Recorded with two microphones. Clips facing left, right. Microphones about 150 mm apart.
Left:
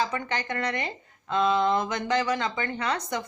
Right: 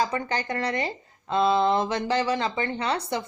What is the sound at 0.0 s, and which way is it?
A woman's voice, 35° right (ahead or behind).